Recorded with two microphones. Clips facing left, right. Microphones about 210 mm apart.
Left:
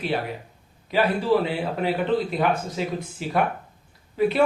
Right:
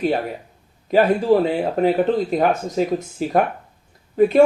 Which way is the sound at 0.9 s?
45° right (ahead or behind).